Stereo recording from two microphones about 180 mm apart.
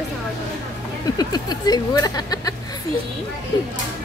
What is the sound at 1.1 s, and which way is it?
Speech, 20° left (ahead or behind).